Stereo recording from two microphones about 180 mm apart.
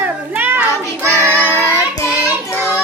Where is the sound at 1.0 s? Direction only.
15° right (ahead or behind).